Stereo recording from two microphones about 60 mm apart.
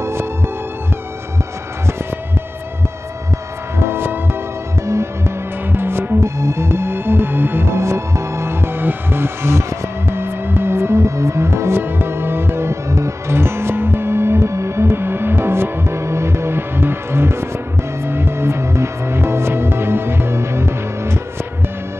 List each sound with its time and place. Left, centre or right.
0.0 s music: right
3.8 s music: right
5.7 s music: right